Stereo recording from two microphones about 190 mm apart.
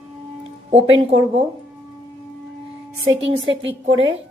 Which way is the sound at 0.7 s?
30° right (ahead or behind).